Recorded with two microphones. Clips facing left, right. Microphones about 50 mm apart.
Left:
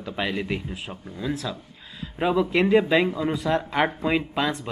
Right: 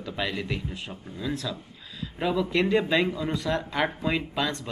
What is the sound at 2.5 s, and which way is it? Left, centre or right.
Speech, centre.